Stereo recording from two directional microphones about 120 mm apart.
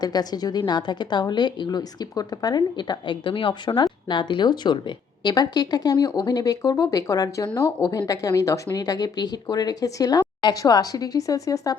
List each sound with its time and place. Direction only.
0.0 s a woman's voice: 35° left (ahead or behind)